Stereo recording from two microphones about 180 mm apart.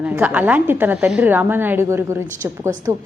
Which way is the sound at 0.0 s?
5° right (ahead or behind).